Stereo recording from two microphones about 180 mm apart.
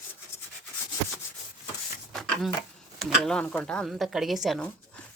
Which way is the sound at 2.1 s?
Centre (ahead or behind).